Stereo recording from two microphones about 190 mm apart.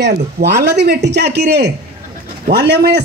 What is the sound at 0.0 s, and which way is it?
A man's voice, 60° right (ahead or behind).